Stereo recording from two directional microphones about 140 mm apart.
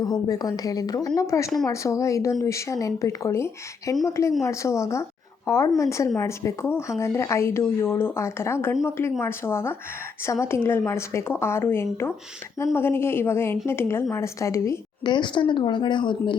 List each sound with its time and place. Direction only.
0.0 s a woman's voice: 25° left (ahead or behind)